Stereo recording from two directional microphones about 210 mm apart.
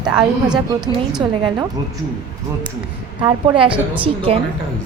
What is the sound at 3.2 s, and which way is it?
A woman's voice, 20° right (ahead or behind).